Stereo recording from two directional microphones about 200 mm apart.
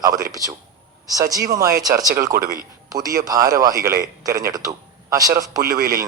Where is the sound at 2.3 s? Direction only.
50° right (ahead or behind).